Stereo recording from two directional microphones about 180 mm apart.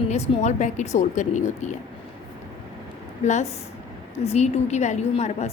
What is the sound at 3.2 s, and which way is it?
A woman's voice, 40° left (ahead or behind).